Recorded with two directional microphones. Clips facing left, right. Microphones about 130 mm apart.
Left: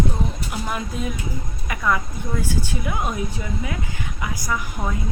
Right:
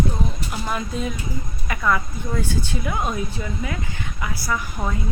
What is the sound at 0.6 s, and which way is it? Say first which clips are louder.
Speech: right 2 dB; 10° left (ahead or behind).